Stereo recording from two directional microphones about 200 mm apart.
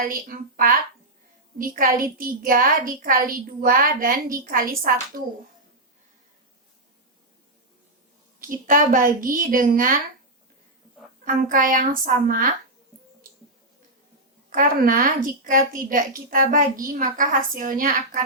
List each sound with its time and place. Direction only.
0.1 s a child's voice: 45° right (ahead or behind)
8.4 s a child's voice: 40° right (ahead or behind)
11.3 s a child's voice: 45° right (ahead or behind)
14.5 s a child's voice: 45° right (ahead or behind)